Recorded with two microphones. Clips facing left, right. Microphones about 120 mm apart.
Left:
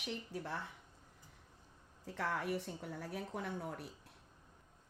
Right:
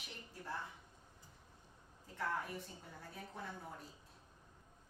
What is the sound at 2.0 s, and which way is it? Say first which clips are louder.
A woman's voice: left 4 dB; 90° left.